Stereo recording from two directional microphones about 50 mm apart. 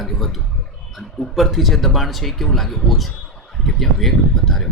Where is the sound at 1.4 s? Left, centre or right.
Centre.